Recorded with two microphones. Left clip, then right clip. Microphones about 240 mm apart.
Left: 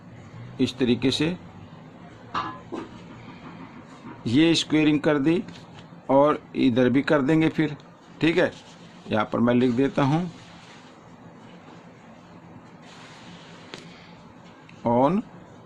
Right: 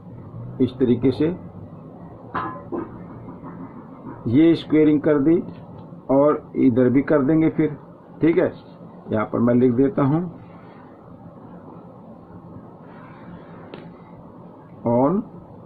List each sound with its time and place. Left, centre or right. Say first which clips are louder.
0.6 s speech: right 4 dB; left
4.4 s speech: right 4 dB; left
14.8 s a sound: right 2 dB; left